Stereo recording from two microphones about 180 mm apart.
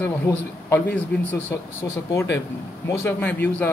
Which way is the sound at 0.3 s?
15° left (ahead or behind).